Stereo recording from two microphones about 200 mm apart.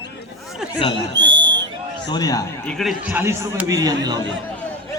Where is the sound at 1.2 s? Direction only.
65° right (ahead or behind).